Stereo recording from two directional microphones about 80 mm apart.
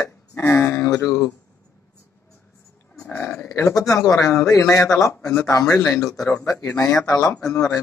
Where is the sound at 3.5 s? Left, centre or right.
Left.